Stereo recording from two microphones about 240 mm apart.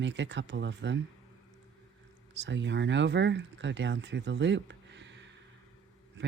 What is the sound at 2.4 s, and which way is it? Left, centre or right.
Speech, right.